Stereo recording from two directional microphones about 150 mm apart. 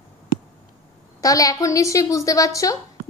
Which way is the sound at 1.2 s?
20° left (ahead or behind).